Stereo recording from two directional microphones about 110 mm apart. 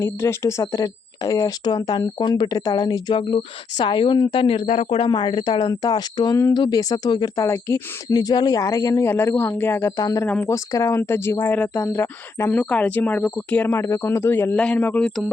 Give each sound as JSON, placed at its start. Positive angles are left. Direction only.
{"t": 0.0, "sound": "speech", "side_deg": 25}
{"t": 4.6, "sound": "speech", "side_deg": 90}
{"t": 4.9, "sound": "speech", "side_deg": 45}
{"t": 7.4, "sound": "speech", "side_deg": 25}
{"t": 10.0, "sound": "speech", "side_deg": 30}
{"t": 10.2, "sound": "speech", "side_deg": 15}
{"t": 10.5, "sound": "speech", "side_deg": 30}
{"t": 14.5, "sound": "speech", "side_deg": 10}